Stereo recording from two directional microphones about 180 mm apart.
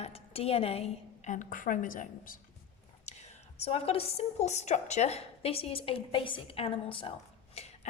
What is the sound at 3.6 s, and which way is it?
A woman's voice, 35° left (ahead or behind).